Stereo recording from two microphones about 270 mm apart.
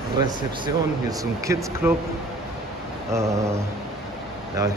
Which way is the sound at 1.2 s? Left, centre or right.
Centre.